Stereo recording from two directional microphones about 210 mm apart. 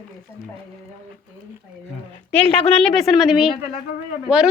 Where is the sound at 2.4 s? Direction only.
5° left (ahead or behind).